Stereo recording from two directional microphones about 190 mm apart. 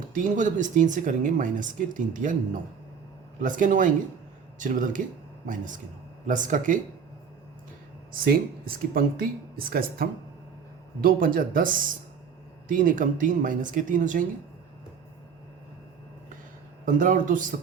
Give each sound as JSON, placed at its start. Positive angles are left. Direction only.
{"t": 0.1, "sound": "speech", "side_deg": -45}
{"t": 8.2, "sound": "speech", "side_deg": -50}
{"t": 16.8, "sound": "speech", "side_deg": -45}